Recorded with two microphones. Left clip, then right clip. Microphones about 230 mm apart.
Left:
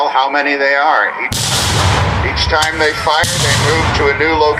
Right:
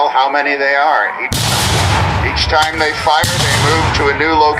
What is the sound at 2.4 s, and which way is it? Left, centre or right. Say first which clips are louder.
A man's voice: even; right.